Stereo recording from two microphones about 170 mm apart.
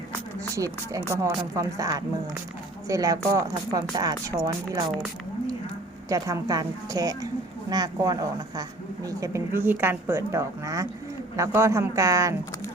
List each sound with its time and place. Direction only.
0.3 s speech: 20° right (ahead or behind)
6.1 s a woman's voice: 20° right (ahead or behind)